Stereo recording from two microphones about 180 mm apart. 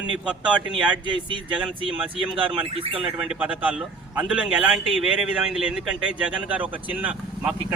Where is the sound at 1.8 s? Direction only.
30° right (ahead or behind).